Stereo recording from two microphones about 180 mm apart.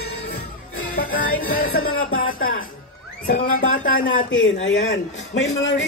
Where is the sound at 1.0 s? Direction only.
55° left (ahead or behind).